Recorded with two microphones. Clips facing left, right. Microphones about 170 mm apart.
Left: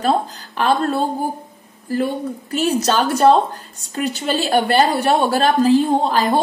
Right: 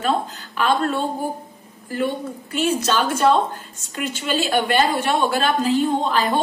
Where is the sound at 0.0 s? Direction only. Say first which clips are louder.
Left 3 dB; 35° left (ahead or behind).